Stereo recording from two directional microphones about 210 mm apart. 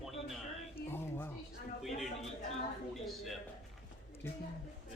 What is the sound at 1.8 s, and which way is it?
A man's voice, centre (ahead or behind).